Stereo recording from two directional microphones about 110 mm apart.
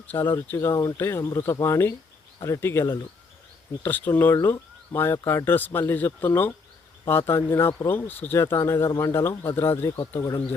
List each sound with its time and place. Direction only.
0.1 s speech: 20° left (ahead or behind)
10.2 s speech: 30° left (ahead or behind)